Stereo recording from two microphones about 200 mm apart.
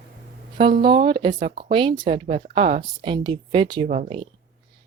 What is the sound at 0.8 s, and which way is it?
Speech, 25° right (ahead or behind).